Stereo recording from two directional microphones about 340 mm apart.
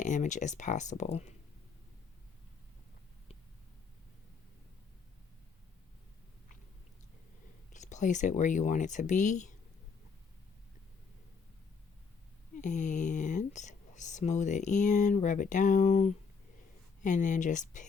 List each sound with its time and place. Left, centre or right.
0.0 s speech: left
7.7 s speech: left
12.6 s speech: left